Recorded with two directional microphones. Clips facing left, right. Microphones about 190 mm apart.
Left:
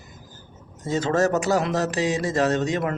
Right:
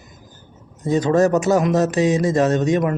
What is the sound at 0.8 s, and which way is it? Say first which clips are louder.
Speech: right 5 dB; 20° right (ahead or behind).